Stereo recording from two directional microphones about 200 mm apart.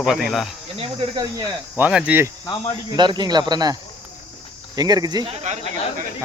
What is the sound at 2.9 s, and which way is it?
Speech, 20° right (ahead or behind).